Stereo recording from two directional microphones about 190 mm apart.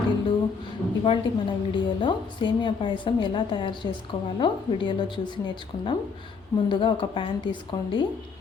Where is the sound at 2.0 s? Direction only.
25° left (ahead or behind).